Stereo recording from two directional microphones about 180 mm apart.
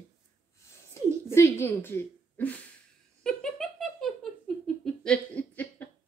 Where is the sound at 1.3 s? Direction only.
15° left (ahead or behind).